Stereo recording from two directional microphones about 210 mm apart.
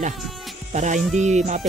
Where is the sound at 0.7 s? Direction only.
35° right (ahead or behind).